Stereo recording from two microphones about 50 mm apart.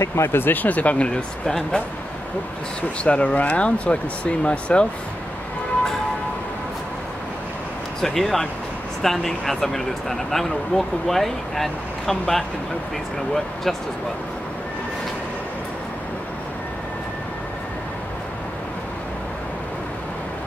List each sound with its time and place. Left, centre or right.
0.0 s speech: left; by 1.8 s centre
3.0 s speech: left
8.0 s speech: centre